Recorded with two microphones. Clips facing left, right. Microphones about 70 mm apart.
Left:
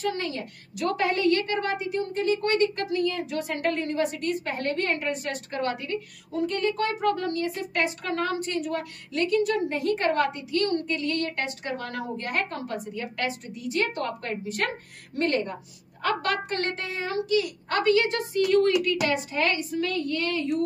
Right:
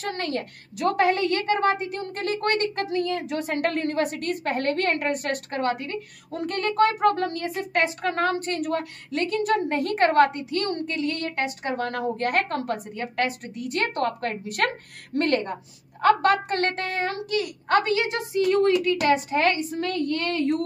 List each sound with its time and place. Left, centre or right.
0.0 s a woman's voice: right
0.7 s a woman's voice: right
2.0 s a woman's voice: right
2.7 s a woman's voice: right
3.6 s a woman's voice: right
6.3 s a woman's voice: right
9.1 s a woman's voice: right
10.6 s a woman's voice: right
11.7 s a woman's voice: right
16.0 s a woman's voice: right
17.8 s a woman's voice: right
18.9 s a woman's voice: right
19.9 s a woman's voice: right